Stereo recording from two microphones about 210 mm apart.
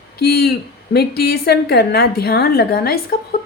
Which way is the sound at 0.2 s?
50° left (ahead or behind).